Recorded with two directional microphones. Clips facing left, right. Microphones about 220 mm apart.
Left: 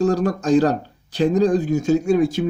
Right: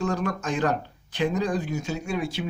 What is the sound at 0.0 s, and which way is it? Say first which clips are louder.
Speech: left 8 dB; 35° left (ahead or behind).